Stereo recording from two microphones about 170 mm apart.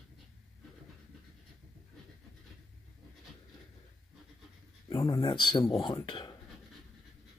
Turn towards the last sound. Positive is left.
turn(degrees=30)  # may be behind; listen again after turning